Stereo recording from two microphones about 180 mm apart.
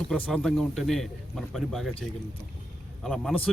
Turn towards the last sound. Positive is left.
turn(degrees=5)  # may be behind; listen again after turning